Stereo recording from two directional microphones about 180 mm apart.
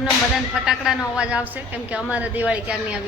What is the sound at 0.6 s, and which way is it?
A woman's voice, 5° right (ahead or behind).